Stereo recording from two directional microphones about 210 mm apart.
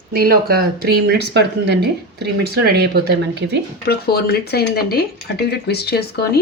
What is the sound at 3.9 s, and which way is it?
Speech, 50° left (ahead or behind).